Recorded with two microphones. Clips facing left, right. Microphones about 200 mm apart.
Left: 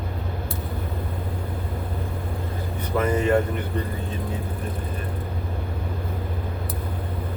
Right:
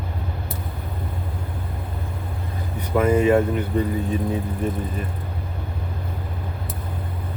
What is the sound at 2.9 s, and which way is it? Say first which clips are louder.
Speech: right 4 dB; 10° right (ahead or behind).